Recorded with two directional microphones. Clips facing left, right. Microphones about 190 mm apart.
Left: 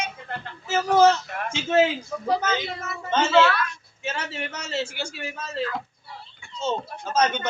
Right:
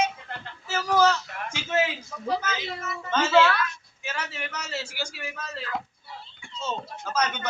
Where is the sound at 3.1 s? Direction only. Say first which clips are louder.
Left 1 dB; 25° left (ahead or behind).